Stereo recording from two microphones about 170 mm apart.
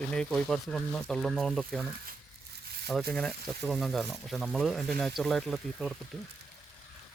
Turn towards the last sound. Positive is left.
turn(degrees=0)  # may be behind; listen again after turning